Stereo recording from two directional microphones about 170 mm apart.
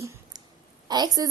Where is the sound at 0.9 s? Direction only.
25° right (ahead or behind).